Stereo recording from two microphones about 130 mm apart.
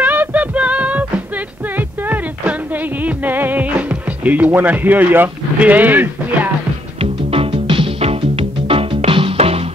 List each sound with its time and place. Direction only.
0.0 s music: 15° right (ahead or behind)
1.8 s a sound: 15° right (ahead or behind)
3.0 s speech: 15° right (ahead or behind)
7.0 s music: 45° right (ahead or behind)